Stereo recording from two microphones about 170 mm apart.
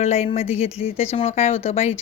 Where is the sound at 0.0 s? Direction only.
40° left (ahead or behind).